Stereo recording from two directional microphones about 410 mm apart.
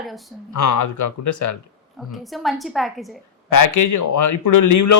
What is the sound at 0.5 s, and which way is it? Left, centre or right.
Speech, left.